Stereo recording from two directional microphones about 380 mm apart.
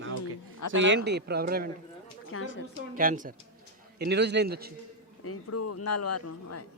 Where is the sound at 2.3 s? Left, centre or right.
Left.